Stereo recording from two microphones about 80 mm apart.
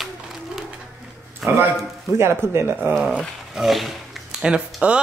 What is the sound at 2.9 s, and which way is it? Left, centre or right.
Speech, centre.